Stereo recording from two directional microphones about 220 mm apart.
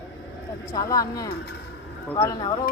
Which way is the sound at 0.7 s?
15° left (ahead or behind).